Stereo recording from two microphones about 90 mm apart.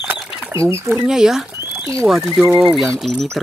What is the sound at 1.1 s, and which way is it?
Speech, 5° right (ahead or behind).